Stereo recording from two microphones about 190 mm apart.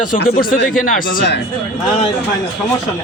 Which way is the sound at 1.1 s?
60° left (ahead or behind).